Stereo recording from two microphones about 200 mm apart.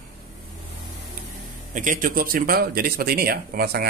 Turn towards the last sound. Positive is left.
turn(degrees=-50)  # may be behind; listen again after turning